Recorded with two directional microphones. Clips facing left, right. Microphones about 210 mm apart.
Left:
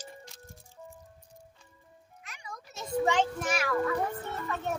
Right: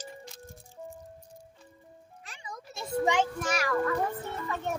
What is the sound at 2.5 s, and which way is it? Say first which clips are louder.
Children playing: right 1 dB; 10° right (ahead or behind).